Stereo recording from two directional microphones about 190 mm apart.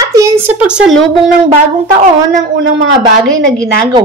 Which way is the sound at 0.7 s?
Centre (ahead or behind).